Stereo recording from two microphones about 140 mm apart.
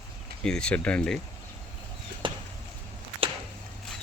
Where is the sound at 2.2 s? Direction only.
35° right (ahead or behind).